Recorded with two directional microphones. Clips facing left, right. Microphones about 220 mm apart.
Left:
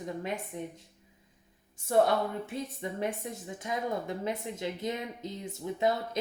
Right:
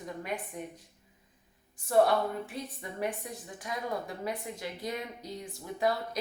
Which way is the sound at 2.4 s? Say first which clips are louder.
Left 4 dB; 25° left (ahead or behind).